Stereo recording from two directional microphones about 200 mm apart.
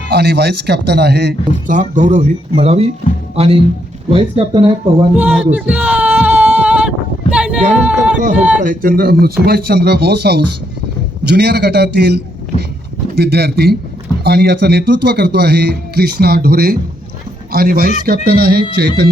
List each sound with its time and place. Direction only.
0.1 s a man's voice: 55° right (ahead or behind)
1.6 s speech: 40° right (ahead or behind)
5.1 s a sound: 5° right (ahead or behind)
8.6 s a man's voice: 45° right (ahead or behind)